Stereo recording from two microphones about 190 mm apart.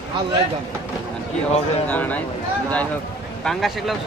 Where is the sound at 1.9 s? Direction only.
10° left (ahead or behind).